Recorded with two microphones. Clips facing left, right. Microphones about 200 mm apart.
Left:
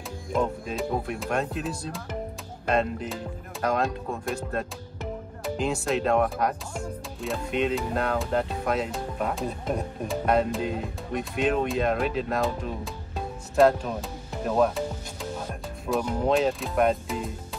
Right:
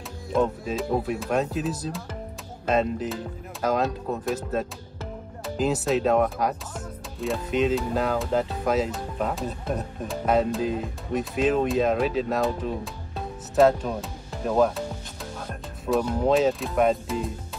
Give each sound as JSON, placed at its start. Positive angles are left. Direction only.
{"t": 0.3, "sound": "speech", "side_deg": -5}
{"t": 5.4, "sound": "speech", "side_deg": 0}
{"t": 15.9, "sound": "speech", "side_deg": 5}